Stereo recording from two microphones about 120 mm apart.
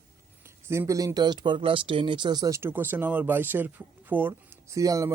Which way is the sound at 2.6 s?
15° right (ahead or behind).